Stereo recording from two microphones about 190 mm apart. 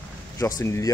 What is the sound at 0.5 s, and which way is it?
Speech, 15° left (ahead or behind).